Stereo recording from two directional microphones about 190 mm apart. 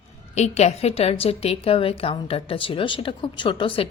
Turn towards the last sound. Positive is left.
turn(degrees=25)  # may be behind; listen again after turning